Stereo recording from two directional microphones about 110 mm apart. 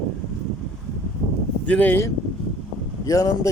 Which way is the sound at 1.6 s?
15° left (ahead or behind).